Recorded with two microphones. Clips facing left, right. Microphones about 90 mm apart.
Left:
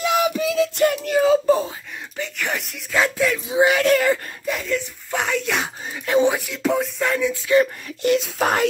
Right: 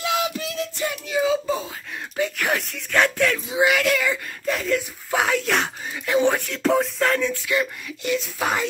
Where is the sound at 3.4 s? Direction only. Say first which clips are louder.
Left 6 dB; 30° left (ahead or behind); by 4.2 s 45° left (ahead or behind).